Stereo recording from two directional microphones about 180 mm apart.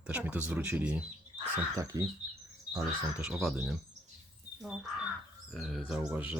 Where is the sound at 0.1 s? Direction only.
5° right (ahead or behind).